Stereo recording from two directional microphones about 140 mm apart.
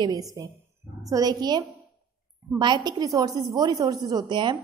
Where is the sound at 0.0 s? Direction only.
25° right (ahead or behind).